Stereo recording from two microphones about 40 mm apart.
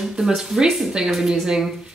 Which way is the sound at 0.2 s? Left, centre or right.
Centre.